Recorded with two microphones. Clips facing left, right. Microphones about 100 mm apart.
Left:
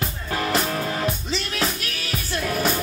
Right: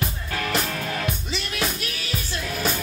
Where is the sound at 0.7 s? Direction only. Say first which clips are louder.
Left 3 dB; 30° left (ahead or behind).